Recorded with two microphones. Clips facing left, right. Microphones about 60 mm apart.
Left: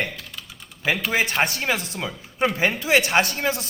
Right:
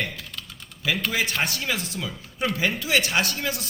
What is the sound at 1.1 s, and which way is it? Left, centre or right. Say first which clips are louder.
A man's voice: left 4 dB; left.